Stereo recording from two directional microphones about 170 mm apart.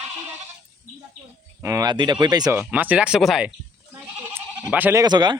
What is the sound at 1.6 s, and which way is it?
Speech, 20° right (ahead or behind).